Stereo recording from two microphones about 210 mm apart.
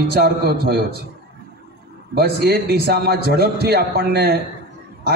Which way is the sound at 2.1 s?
50° right (ahead or behind).